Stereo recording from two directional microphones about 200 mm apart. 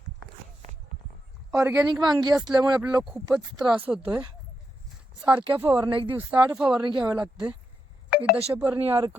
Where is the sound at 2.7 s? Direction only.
5° right (ahead or behind).